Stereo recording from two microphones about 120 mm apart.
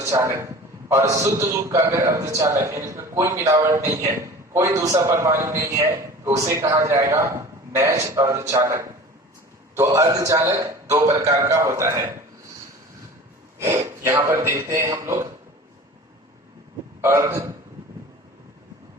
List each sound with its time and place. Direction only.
0.0 s a man's voice: 20° right (ahead or behind)
13.6 s a man's voice: 20° right (ahead or behind)
17.0 s a man's voice: 20° right (ahead or behind)